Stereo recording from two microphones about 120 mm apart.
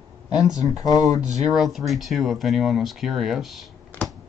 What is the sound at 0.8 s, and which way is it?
Speech, 30° left (ahead or behind).